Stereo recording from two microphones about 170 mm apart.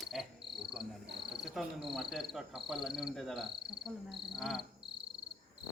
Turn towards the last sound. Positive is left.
turn(degrees=0)  # may be behind; listen again after turning